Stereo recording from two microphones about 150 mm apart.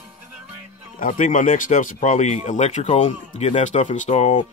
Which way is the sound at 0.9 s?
60° left (ahead or behind).